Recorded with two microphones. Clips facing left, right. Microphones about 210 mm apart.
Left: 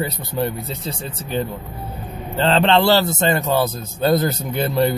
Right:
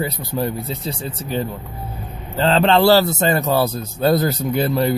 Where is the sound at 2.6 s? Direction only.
35° right (ahead or behind).